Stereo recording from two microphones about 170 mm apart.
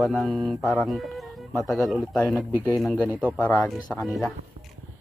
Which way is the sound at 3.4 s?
15° left (ahead or behind).